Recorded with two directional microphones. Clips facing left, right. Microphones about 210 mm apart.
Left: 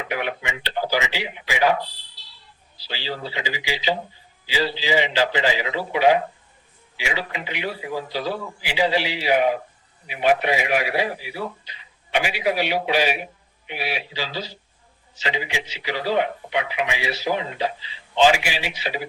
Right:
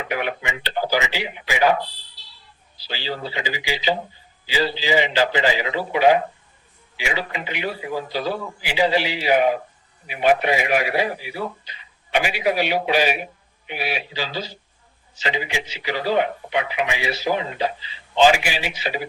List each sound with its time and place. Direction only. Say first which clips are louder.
0.0 s speech: right 1 dB; 45° right (ahead or behind)
2.1 s smoke detector: even; centre (ahead or behind)
2.8 s a man's voice: right 2 dB; 45° right (ahead or behind)